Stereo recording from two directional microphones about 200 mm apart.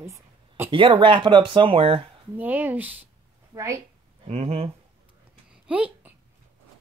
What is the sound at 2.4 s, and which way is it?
Speech, 10° right (ahead or behind).